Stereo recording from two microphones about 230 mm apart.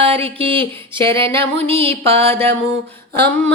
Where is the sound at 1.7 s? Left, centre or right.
Right.